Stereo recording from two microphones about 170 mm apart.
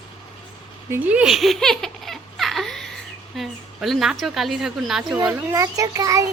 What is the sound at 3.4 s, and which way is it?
A woman's voice, centre (ahead or behind).